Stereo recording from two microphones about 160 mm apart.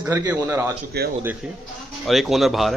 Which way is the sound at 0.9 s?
90° right.